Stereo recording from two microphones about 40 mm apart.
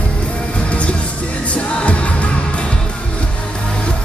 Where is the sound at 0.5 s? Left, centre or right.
Left.